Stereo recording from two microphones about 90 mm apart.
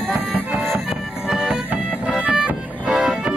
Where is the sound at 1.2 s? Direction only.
5° right (ahead or behind).